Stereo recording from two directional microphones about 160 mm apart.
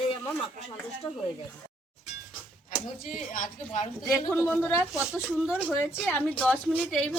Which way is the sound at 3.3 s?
50° left (ahead or behind).